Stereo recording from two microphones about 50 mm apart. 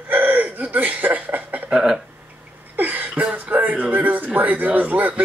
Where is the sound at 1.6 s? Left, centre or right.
Centre.